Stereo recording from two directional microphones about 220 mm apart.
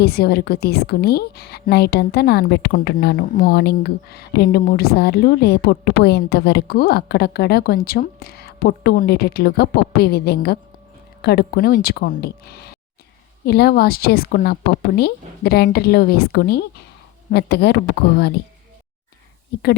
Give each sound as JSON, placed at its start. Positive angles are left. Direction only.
{"t": 0.0, "sound": "a woman's voice", "side_deg": 45}